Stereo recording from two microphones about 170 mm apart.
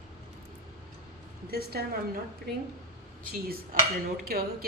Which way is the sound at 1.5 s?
65° right (ahead or behind).